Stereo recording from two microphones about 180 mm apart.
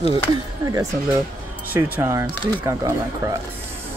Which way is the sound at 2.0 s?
15° right (ahead or behind).